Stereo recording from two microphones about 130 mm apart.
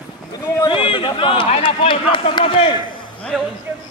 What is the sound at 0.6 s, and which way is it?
A man's voice, 40° left (ahead or behind).